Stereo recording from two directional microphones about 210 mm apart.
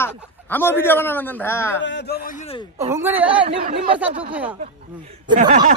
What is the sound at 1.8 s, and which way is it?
Speech, 55° left (ahead or behind).